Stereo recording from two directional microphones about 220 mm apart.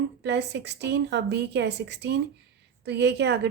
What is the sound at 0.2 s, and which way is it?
A woman's voice, 50° right (ahead or behind).